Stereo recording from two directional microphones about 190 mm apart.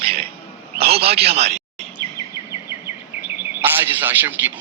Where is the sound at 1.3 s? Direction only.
35° right (ahead or behind).